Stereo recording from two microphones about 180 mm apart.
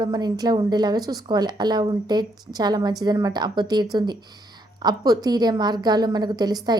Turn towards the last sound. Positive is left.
turn(degrees=-20)  # may be behind; listen again after turning